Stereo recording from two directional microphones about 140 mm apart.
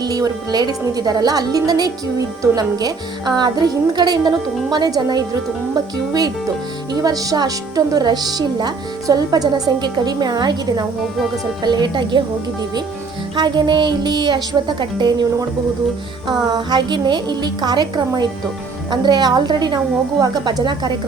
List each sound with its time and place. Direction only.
0.0 s speech: 25° right (ahead or behind)
6.9 s speech: 25° right (ahead or behind)
13.3 s speech: 35° right (ahead or behind)